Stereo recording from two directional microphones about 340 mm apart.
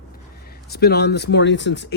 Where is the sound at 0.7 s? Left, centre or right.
Left.